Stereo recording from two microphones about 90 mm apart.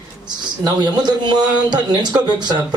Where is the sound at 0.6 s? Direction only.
50° right (ahead or behind).